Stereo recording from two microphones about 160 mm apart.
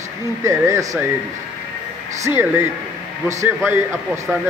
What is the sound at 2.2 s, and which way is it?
Speech, 15° right (ahead or behind).